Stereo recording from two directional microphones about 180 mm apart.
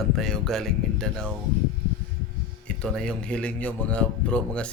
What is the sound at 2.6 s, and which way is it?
A man's voice, 5° left (ahead or behind).